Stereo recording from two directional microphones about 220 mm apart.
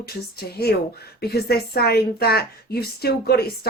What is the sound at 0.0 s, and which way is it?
Speech, 45° left (ahead or behind).